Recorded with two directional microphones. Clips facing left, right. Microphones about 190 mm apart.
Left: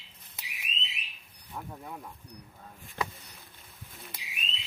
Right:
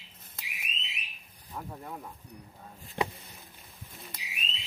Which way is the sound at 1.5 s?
Centre (ahead or behind).